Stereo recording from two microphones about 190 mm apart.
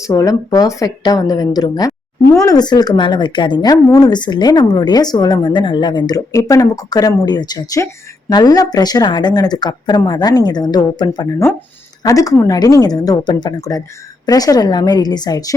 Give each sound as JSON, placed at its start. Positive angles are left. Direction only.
{"t": 0.0, "sound": "a woman's voice", "side_deg": 15}